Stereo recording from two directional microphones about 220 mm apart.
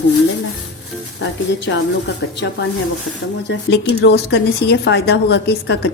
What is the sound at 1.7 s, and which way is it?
Speech, 55° left (ahead or behind).